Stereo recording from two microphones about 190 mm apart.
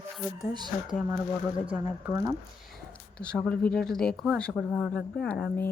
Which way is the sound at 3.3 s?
5° left (ahead or behind).